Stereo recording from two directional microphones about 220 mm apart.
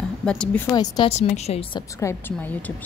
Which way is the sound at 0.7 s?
20° left (ahead or behind).